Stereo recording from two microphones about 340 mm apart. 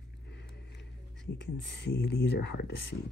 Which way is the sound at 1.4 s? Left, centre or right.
Left.